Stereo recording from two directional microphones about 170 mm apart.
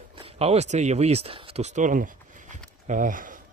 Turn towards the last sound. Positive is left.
turn(degrees=-50)  # may be behind; listen again after turning